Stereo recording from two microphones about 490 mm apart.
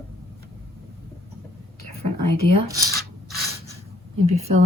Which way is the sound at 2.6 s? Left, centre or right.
Centre.